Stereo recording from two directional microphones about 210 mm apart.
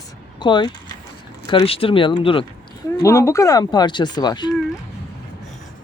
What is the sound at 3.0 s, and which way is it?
Speech, 15° left (ahead or behind).